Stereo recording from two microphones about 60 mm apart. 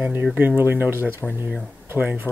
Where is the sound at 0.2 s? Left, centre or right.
Right.